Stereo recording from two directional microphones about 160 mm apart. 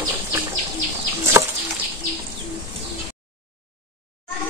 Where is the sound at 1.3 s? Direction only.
15° right (ahead or behind).